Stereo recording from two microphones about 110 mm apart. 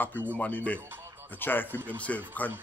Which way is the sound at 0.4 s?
15° left (ahead or behind).